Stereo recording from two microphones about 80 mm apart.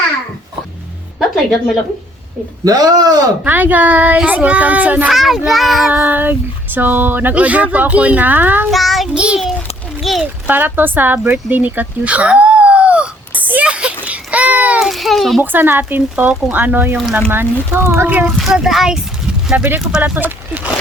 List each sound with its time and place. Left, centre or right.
1.2 s music: centre
2.6 s a man's voice: right
3.4 s speech: right
5.0 s speech: centre
6.0 s speech: right
8.7 s speech: centre
9.1 s a child's voice: centre
10.0 s a child's voice: centre
10.4 s a sound: right
14.8 s child singing: centre
15.4 s speech: right
18.3 s speech: centre
19.5 s speech: right